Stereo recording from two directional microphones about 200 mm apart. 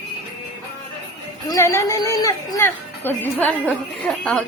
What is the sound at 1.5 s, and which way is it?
Music, 15° left (ahead or behind).